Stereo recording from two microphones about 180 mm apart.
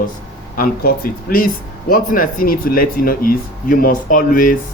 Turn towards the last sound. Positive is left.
turn(degrees=50)  # may be behind; listen again after turning